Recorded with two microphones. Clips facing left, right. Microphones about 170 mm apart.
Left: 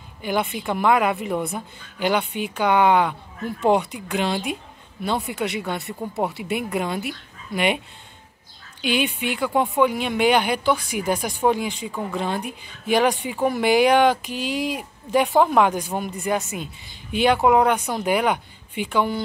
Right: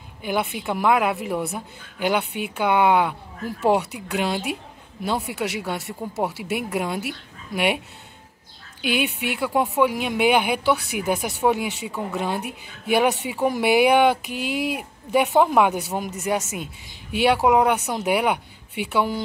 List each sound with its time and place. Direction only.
0.2 s a woman's voice: 5° right (ahead or behind)
8.8 s speech: 5° right (ahead or behind)
14.3 s speech: 60° right (ahead or behind)
14.8 s speech: 5° right (ahead or behind)